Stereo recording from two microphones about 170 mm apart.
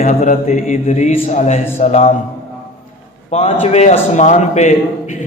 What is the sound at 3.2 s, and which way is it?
A man's voice, 40° left (ahead or behind).